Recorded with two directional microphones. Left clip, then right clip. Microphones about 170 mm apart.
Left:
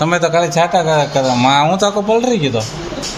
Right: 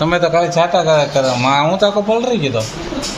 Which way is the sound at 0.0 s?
15° left (ahead or behind).